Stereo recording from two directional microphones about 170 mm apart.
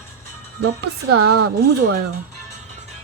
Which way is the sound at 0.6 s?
70° right (ahead or behind).